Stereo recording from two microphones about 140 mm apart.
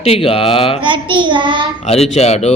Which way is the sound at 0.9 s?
35° right (ahead or behind).